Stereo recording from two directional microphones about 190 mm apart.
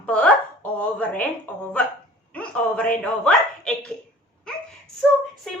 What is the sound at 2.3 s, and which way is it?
Speech, 5° left (ahead or behind).